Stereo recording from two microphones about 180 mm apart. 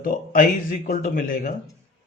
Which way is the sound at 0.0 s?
50° left (ahead or behind).